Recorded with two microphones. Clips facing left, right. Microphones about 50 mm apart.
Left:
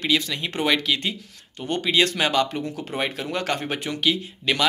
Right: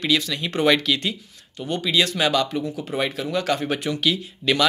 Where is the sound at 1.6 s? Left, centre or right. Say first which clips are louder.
Left 1 dB; left.